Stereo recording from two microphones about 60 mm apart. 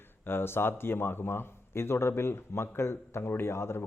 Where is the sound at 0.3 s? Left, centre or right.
Left.